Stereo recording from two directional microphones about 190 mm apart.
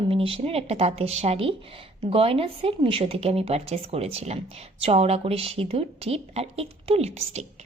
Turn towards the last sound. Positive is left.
turn(degrees=-35)  # may be behind; listen again after turning